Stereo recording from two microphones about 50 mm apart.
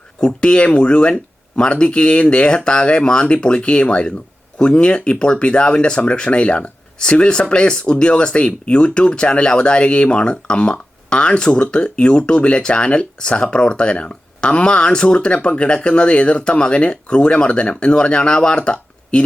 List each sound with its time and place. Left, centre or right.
0.2 s speech: left